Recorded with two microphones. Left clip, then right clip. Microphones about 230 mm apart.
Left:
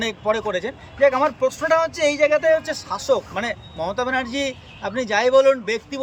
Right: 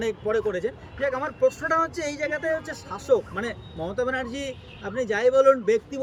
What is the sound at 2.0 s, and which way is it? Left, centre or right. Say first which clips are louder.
Speech: left 11 dB; left.